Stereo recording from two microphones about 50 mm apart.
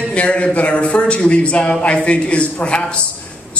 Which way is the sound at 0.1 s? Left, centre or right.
Left.